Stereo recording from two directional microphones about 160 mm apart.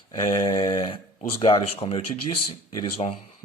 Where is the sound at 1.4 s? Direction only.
35° left (ahead or behind).